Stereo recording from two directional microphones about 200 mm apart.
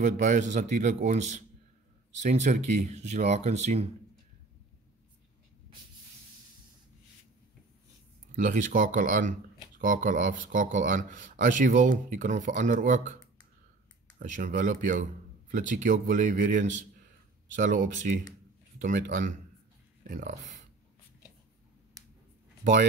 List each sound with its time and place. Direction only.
0.0 s speech: 40° right (ahead or behind)
8.4 s speech: 40° right (ahead or behind)